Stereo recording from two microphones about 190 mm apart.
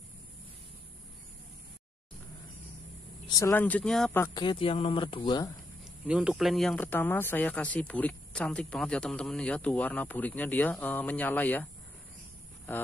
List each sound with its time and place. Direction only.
3.3 s speech: 15° left (ahead or behind)
4.2 s speech: 20° left (ahead or behind)
6.0 s speech: 5° right (ahead or behind)